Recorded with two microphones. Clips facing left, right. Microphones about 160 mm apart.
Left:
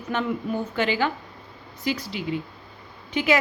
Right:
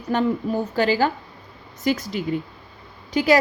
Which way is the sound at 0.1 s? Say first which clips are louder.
Right 5 dB; 35° right (ahead or behind).